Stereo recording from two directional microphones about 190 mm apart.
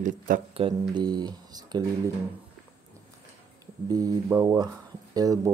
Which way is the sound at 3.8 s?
20° right (ahead or behind).